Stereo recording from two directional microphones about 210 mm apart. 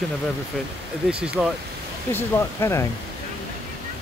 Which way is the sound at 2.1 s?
10° left (ahead or behind).